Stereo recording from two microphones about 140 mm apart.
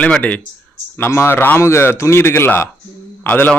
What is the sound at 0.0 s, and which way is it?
A man's voice, 10° left (ahead or behind).